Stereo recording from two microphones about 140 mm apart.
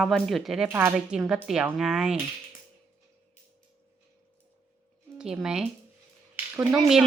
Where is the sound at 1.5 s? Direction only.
5° right (ahead or behind).